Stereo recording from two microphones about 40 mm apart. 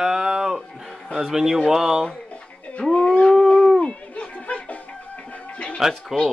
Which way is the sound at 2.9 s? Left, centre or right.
Left.